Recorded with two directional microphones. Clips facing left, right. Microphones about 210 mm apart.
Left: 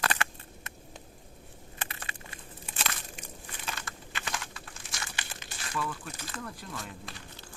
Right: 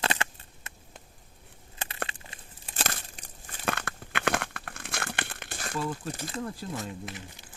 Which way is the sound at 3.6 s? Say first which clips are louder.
Right 10 dB; 60° right (ahead or behind).